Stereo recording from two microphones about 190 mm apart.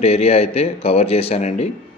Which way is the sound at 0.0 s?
30° left (ahead or behind).